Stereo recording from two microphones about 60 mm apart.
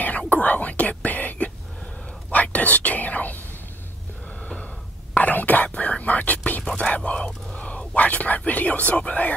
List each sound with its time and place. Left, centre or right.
0.3 s whispering: left
5.1 s whispering: left